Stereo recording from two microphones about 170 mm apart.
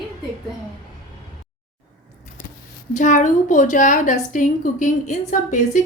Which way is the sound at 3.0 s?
45° left (ahead or behind).